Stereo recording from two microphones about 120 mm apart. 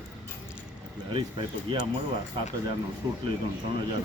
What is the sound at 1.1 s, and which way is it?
Speech, 40° right (ahead or behind).